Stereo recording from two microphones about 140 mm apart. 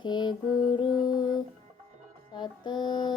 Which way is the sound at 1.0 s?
30° left (ahead or behind).